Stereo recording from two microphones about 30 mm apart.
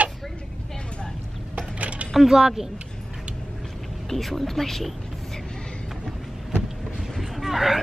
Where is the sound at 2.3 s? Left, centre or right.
Centre.